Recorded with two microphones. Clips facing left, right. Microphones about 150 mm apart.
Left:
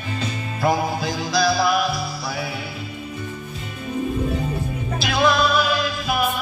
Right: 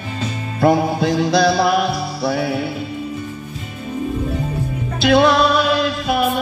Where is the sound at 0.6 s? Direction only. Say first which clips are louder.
Right 6 dB; 60° right (ahead or behind).